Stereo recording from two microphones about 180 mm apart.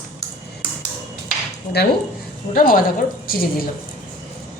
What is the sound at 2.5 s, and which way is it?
A woman's voice, 50° left (ahead or behind).